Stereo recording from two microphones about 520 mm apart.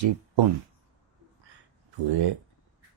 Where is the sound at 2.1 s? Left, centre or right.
Right.